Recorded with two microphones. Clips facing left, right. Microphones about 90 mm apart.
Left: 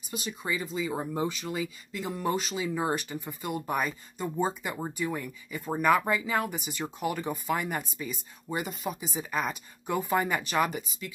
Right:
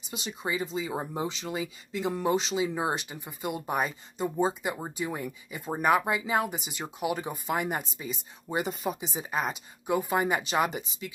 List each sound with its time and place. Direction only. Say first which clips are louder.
0.0 s speech: right 1 dB; 25° right (ahead or behind)